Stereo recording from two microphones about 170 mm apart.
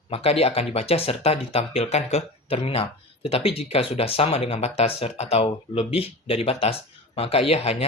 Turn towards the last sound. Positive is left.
turn(degrees=35)  # may be behind; listen again after turning